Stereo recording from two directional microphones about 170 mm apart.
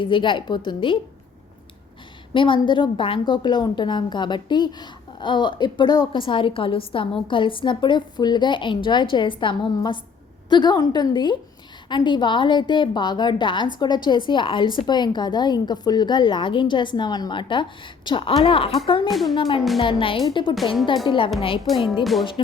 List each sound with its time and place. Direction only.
0.0 s a woman's voice: 30° left (ahead or behind)
2.3 s a woman's voice: 30° left (ahead or behind)
19.0 s speech: centre (ahead or behind)
19.4 s a woman's voice: 30° left (ahead or behind)
21.7 s speech: centre (ahead or behind)